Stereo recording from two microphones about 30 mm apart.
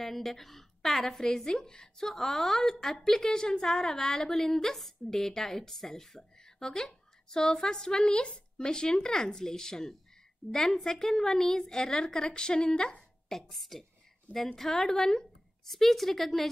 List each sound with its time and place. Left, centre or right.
0.0 s a woman's voice: centre
1.2 s a woman's voice: left
6.1 s a sound: left
6.7 s speech: centre
8.1 s speech: left
8.5 s a woman's voice: left
13.3 s a woman's voice: centre
15.6 s speech: centre